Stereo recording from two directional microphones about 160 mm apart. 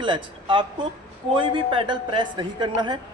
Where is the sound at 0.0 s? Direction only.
30° right (ahead or behind).